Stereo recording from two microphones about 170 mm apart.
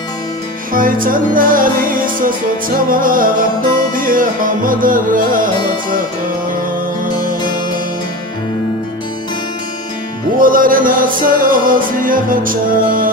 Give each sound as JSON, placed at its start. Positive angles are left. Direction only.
{"t": 0.7, "sound": "music", "side_deg": -55}
{"t": 10.4, "sound": "music", "side_deg": -55}